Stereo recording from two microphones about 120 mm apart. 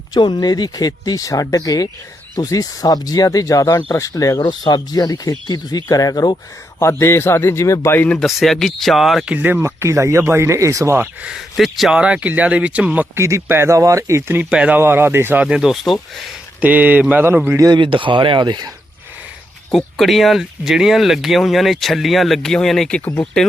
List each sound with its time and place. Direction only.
0.1 s speech: 35° left (ahead or behind)
4.4 s a man's voice: 40° left (ahead or behind); by 9.3 s centre (ahead or behind)
9.3 s speech: 15° right (ahead or behind)
13.1 s speech: 25° right (ahead or behind)
14.5 s speech: 10° right (ahead or behind)
16.6 s speech: 15° right (ahead or behind)
17.6 s speech: 40° right (ahead or behind)
19.7 s speech: centre (ahead or behind)